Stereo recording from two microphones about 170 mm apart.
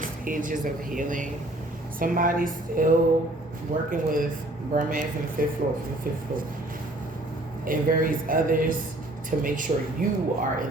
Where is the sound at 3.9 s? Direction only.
55° right (ahead or behind).